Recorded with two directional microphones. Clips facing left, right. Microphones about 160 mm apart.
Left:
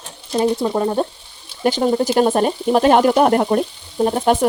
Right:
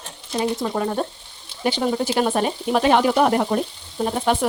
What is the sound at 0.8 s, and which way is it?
Speech, 30° left (ahead or behind).